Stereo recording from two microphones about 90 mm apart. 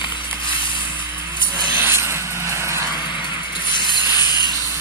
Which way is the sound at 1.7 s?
25° right (ahead or behind).